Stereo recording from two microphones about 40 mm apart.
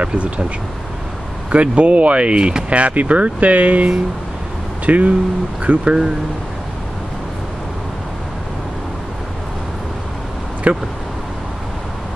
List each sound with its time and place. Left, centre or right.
0.0 s speech: right
1.5 s speech: right
10.7 s speech: right